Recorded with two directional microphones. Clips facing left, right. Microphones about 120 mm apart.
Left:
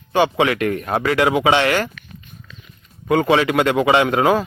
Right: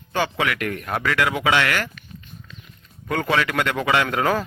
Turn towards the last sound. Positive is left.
turn(degrees=15)  # may be behind; listen again after turning